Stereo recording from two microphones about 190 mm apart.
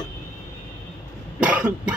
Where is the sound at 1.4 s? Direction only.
5° right (ahead or behind).